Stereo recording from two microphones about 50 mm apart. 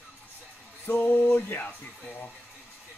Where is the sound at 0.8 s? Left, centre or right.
Left.